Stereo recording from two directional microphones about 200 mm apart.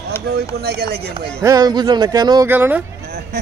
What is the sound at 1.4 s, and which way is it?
Speech, 15° right (ahead or behind).